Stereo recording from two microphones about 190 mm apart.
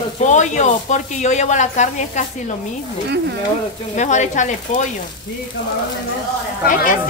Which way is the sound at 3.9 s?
40° left (ahead or behind).